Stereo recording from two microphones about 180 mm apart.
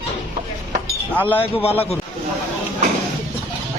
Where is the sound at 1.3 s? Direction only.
30° left (ahead or behind).